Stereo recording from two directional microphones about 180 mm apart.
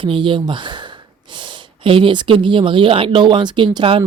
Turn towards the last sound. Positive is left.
turn(degrees=-30)  # may be behind; listen again after turning